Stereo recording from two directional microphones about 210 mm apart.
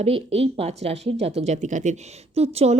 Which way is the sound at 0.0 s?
30° right (ahead or behind).